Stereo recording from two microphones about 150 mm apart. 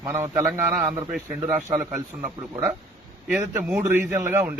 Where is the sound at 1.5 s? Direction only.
20° right (ahead or behind).